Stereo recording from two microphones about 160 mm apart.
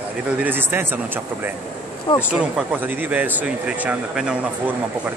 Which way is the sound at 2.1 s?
35° left (ahead or behind).